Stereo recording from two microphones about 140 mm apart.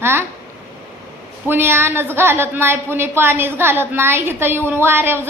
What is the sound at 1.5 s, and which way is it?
A woman's voice, 15° right (ahead or behind).